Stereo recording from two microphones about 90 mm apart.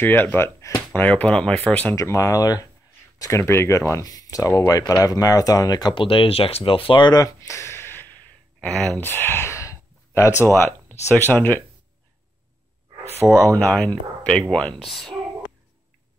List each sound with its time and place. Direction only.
0.0 s speech: 20° left (ahead or behind)
0.9 s speech: 20° left (ahead or behind)
2.0 s speech: 35° left (ahead or behind)
6.0 s speech: 85° left; by 7.2 s 65° left (ahead or behind)
7.2 s speech: 35° left (ahead or behind)
13.5 s speech: 15° left (ahead or behind)